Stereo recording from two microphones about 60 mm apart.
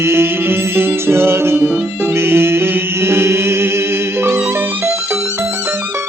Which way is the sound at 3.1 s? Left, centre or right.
Right.